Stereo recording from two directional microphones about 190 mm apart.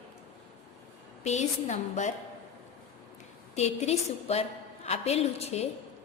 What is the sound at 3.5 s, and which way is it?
A woman's voice, 35° left (ahead or behind).